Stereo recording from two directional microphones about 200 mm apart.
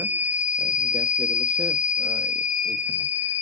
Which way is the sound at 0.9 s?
25° right (ahead or behind).